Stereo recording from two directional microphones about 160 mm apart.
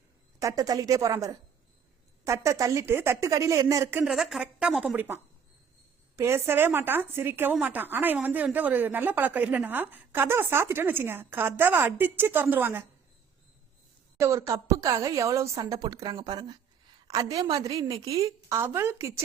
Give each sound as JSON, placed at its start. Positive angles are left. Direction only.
{"t": 0.4, "sound": "a woman's voice", "side_deg": -20}
{"t": 4.0, "sound": "a woman's voice", "side_deg": 0}
{"t": 14.2, "sound": "a woman's voice", "side_deg": -20}